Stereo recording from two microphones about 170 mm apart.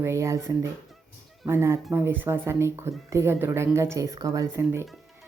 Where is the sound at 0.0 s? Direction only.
15° right (ahead or behind).